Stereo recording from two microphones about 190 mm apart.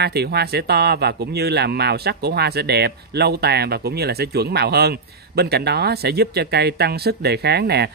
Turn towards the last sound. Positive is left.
turn(degrees=-60)  # may be behind; listen again after turning